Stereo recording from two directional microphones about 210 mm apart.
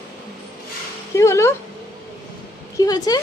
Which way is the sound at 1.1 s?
15° left (ahead or behind).